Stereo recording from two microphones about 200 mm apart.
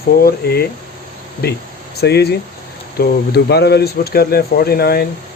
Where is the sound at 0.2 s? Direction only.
50° left (ahead or behind).